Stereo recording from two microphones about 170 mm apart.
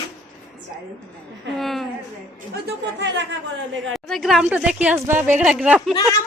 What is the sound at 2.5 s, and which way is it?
Speech, 90° right.